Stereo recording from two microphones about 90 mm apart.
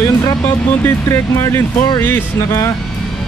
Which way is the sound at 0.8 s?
30° left (ahead or behind).